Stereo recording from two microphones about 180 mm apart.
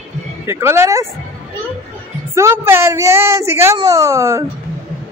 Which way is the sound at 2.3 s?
15° right (ahead or behind).